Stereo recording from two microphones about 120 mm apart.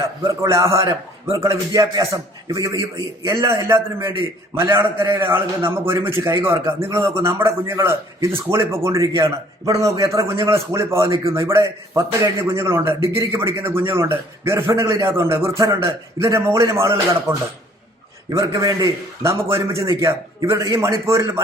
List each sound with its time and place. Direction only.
0.2 s a man's voice: 25° right (ahead or behind)